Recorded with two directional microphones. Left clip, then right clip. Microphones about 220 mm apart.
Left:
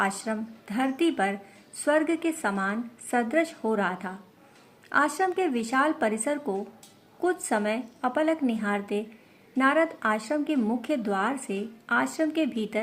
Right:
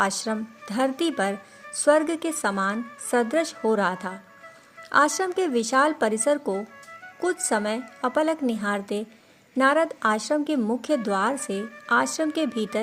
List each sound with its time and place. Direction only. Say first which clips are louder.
0.0 s a woman's voice: right 3 dB; 45° right (ahead or behind)